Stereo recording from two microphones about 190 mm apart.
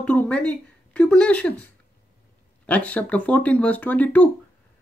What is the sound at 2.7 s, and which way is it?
Speech, 10° left (ahead or behind).